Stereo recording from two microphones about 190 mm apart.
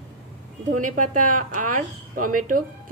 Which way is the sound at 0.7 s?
40° right (ahead or behind).